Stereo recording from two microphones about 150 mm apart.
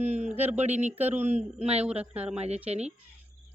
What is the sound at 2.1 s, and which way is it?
Speech, 10° right (ahead or behind).